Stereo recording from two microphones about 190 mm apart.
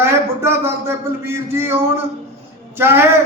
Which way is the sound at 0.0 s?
15° right (ahead or behind).